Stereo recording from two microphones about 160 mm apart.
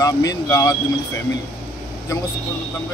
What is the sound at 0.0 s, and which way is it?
Speech, 20° left (ahead or behind).